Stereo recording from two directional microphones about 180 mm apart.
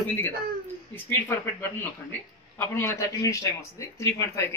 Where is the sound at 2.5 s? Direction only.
15° left (ahead or behind).